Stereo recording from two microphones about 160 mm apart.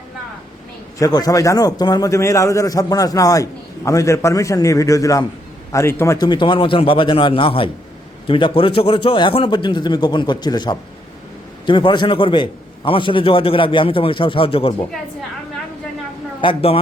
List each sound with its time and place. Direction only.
0.9 s a man's voice: 25° left (ahead or behind)
16.4 s a man's voice: 35° left (ahead or behind)